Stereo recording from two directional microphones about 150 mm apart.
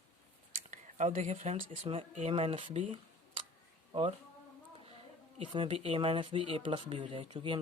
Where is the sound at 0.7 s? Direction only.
55° right (ahead or behind).